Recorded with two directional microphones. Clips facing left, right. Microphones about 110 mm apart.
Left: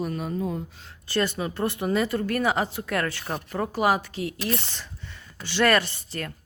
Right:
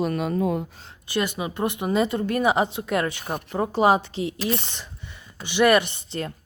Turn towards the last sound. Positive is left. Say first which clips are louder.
# right 3 dB
turn(degrees=-20)  # may be behind; listen again after turning